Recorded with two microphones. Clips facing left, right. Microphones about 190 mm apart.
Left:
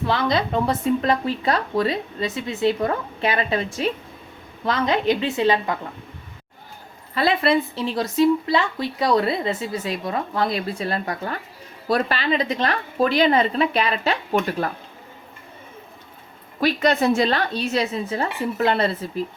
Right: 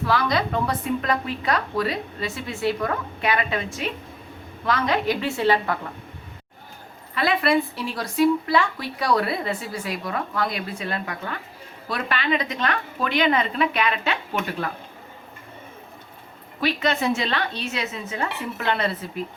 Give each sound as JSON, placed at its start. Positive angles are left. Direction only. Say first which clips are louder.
{"t": 0.0, "sound": "speech", "louder": "left 1 dB", "side_deg": 25}
{"t": 7.1, "sound": "a woman's voice", "louder": "left 2 dB", "side_deg": 30}
{"t": 16.6, "sound": "a woman's voice", "louder": "left 4 dB", "side_deg": 40}